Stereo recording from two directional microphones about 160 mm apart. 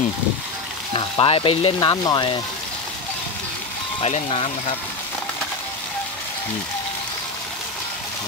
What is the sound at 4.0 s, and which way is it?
Frying, 40° left (ahead or behind).